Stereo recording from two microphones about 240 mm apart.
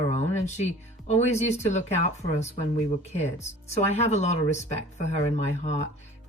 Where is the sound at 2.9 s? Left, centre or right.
Left.